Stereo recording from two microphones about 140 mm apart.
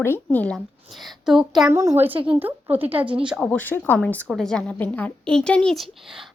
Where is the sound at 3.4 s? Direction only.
10° left (ahead or behind).